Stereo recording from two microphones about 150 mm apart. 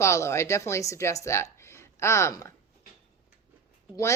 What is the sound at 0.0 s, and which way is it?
Speech, 20° left (ahead or behind).